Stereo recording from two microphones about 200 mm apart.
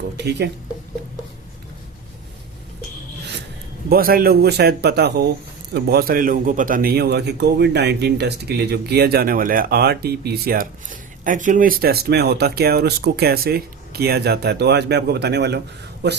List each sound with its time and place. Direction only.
0.2 s speech: 55° right (ahead or behind)
3.8 s a man's voice: 50° right (ahead or behind)